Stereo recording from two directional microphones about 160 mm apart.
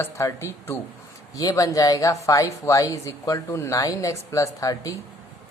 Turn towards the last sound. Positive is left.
turn(degrees=20)  # may be behind; listen again after turning